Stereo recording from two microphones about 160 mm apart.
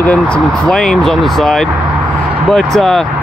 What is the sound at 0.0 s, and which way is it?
Speech, 10° left (ahead or behind).